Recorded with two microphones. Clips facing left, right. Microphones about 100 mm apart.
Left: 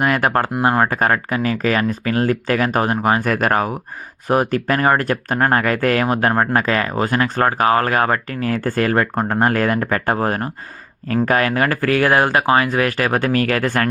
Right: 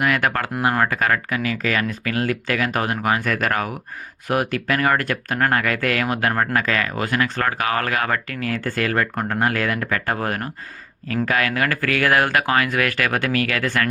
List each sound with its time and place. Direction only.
0.0 s speech: 40° left (ahead or behind)